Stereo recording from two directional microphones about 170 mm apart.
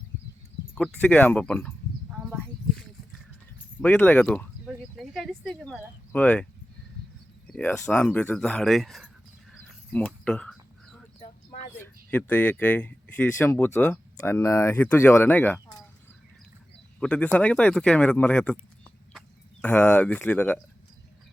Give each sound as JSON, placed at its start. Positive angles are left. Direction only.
{"t": 0.8, "sound": "speech", "side_deg": 5}
{"t": 2.0, "sound": "a sound", "side_deg": -5}
{"t": 3.8, "sound": "speech", "side_deg": 10}
{"t": 4.6, "sound": "a sound", "side_deg": 0}
{"t": 6.1, "sound": "speech", "side_deg": 10}
{"t": 9.5, "sound": "a sound", "side_deg": 0}
{"t": 11.8, "sound": "speech", "side_deg": 10}
{"t": 17.0, "sound": "speech", "side_deg": 10}
{"t": 19.6, "sound": "speech", "side_deg": 10}